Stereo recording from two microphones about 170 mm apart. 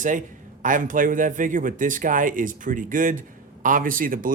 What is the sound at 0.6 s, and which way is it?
Speech, 50° right (ahead or behind).